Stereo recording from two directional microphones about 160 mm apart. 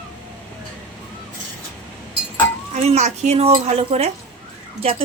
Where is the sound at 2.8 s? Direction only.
45° right (ahead or behind).